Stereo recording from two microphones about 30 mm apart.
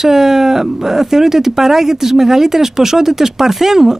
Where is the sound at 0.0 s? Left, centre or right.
Centre.